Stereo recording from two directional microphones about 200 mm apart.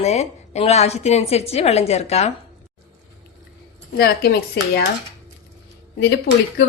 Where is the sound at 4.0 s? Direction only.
55° left (ahead or behind).